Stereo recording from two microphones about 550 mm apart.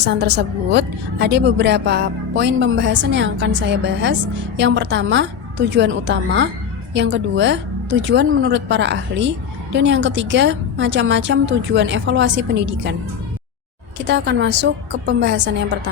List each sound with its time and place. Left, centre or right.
0.0 s a woman's voice: centre
4.5 s a woman's voice: centre
14.1 s a woman's voice: centre